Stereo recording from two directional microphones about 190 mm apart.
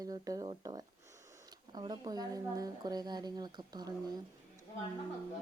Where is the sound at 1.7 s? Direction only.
20° right (ahead or behind).